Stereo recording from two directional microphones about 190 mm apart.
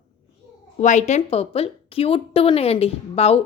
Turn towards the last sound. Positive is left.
turn(degrees=30)  # may be behind; listen again after turning